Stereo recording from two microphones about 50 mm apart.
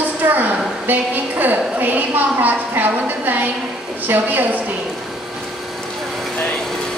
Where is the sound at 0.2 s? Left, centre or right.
Right.